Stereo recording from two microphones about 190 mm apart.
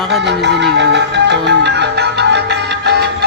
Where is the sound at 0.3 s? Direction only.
65° right (ahead or behind).